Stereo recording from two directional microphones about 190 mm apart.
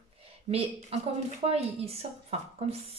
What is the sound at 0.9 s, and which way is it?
A woman's voice, 30° right (ahead or behind).